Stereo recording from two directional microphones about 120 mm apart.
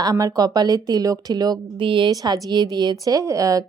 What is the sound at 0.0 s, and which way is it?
A woman's voice, 30° right (ahead or behind).